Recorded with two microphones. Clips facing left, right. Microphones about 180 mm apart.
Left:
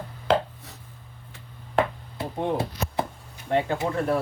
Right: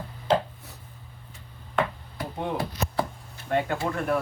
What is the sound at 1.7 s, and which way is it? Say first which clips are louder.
Chopping: left 3 dB; 25° left (ahead or behind).